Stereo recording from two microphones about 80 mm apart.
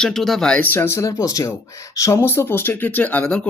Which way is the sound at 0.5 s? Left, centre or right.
Left.